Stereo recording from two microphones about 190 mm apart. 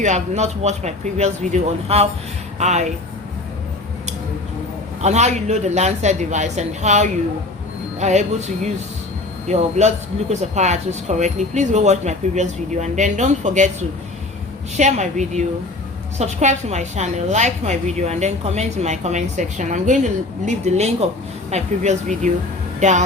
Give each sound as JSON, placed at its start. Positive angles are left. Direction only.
{"t": 0.0, "sound": "speech", "side_deg": -35}
{"t": 5.0, "sound": "speech", "side_deg": -35}
{"t": 14.8, "sound": "speech", "side_deg": -40}